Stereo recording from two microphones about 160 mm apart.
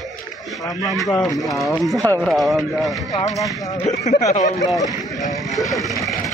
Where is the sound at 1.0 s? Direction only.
20° left (ahead or behind).